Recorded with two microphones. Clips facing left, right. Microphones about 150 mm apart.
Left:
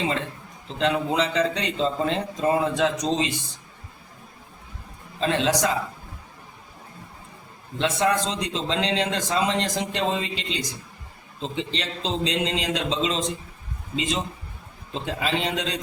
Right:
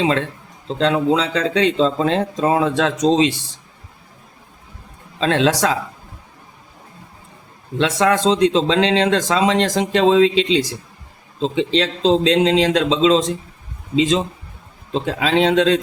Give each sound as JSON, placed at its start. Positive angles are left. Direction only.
{"t": 0.0, "sound": "speech", "side_deg": -90}
{"t": 5.2, "sound": "speech", "side_deg": -90}
{"t": 7.8, "sound": "speech", "side_deg": -90}
{"t": 14.9, "sound": "speech", "side_deg": -90}